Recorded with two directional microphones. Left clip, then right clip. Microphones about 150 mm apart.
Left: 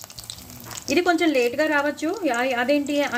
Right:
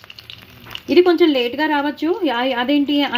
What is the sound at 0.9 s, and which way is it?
Speech, 35° right (ahead or behind).